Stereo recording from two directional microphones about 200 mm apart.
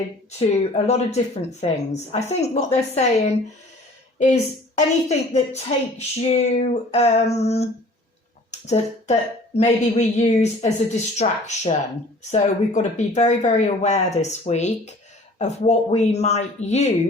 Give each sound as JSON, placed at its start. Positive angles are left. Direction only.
{"t": 0.9, "sound": "a woman's voice", "side_deg": 35}